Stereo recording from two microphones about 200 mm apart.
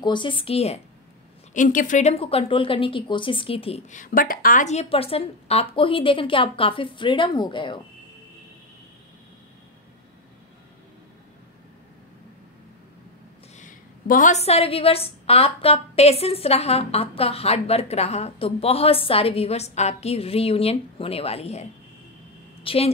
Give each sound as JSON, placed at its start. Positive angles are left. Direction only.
{"t": 0.0, "sound": "a woman's voice", "side_deg": 25}
{"t": 1.5, "sound": "a woman's voice", "side_deg": 40}
{"t": 13.6, "sound": "a woman's voice", "side_deg": 40}